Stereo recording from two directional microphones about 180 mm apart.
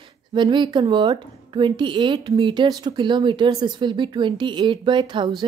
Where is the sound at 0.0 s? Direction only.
25° right (ahead or behind).